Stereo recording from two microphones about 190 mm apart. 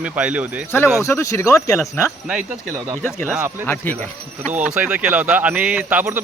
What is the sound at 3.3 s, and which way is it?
Speech, 10° right (ahead or behind).